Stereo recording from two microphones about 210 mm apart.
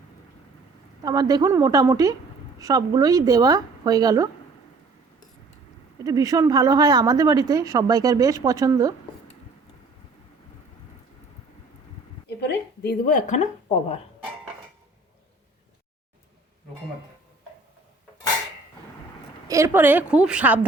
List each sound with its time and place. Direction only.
1.0 s a woman's voice: 20° right (ahead or behind)
6.1 s a woman's voice: 15° right (ahead or behind)
12.4 s a woman's voice: 50° left (ahead or behind); by 14.0 s 30° left (ahead or behind)
19.5 s a woman's voice: 15° right (ahead or behind)